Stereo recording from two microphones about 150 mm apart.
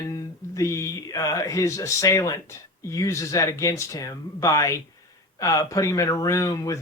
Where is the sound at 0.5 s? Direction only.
20° left (ahead or behind).